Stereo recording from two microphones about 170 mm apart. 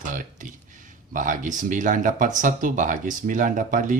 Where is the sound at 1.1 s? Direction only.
50° right (ahead or behind).